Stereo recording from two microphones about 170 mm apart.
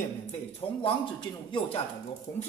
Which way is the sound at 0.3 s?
30° left (ahead or behind).